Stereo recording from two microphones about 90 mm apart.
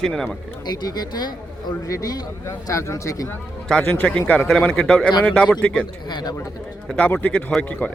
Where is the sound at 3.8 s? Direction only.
15° left (ahead or behind).